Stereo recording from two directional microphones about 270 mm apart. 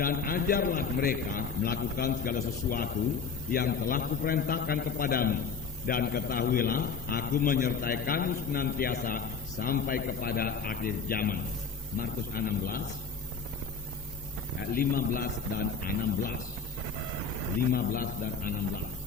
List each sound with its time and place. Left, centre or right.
0.0 s a man's voice: left
14.7 s a man's voice: left
17.7 s a man's voice: left